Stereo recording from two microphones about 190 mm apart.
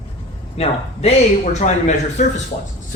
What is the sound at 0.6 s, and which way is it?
A man's voice, 35° left (ahead or behind).